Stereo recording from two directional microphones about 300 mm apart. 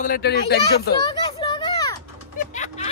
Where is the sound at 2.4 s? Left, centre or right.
Left.